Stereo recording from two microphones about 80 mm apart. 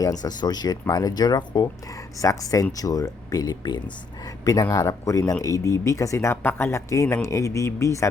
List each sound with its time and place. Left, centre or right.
0.0 s speech: left
2.2 s speech: left
4.7 s speech: left
6.3 s speech: left